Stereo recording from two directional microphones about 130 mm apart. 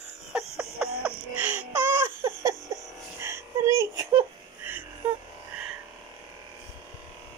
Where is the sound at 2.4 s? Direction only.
25° right (ahead or behind).